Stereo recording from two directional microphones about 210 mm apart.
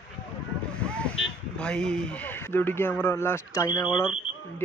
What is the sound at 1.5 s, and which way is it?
A man's voice, 5° left (ahead or behind).